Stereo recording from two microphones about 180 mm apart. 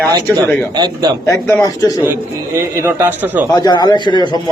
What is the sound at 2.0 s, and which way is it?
A man's voice, 10° right (ahead or behind).